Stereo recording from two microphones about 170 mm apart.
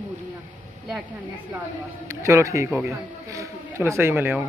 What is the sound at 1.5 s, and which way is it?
A man's voice, 15° right (ahead or behind).